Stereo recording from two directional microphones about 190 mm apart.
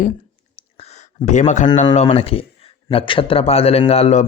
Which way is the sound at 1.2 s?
40° left (ahead or behind).